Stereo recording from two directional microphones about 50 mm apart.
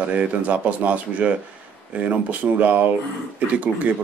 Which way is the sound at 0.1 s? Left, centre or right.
Right.